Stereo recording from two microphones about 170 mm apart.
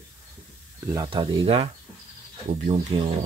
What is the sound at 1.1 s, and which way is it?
Speech, 30° right (ahead or behind).